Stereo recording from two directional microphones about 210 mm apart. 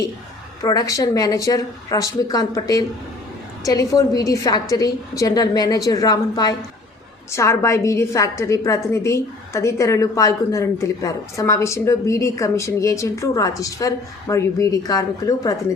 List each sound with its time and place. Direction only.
0.6 s a woman's voice: 15° left (ahead or behind)